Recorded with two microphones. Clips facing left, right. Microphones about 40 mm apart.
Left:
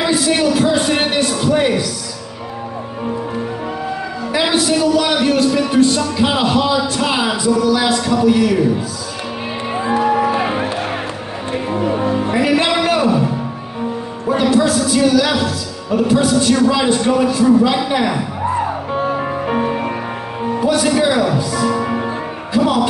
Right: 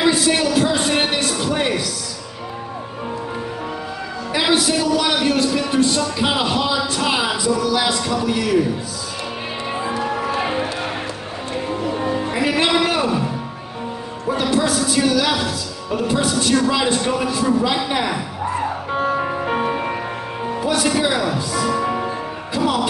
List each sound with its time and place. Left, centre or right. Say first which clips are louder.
0.4 s a man's voice: left 3 dB; centre
4.3 s a man's voice: left 2 dB; centre
9.7 s music: left 7 dB; centre
14.4 s a man's voice: left 5 dB; centre
19.0 s music: even; centre
22.6 s speech: left 5 dB; centre